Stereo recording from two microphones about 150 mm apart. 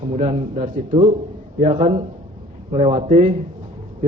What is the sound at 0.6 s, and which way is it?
Speech, 65° right (ahead or behind).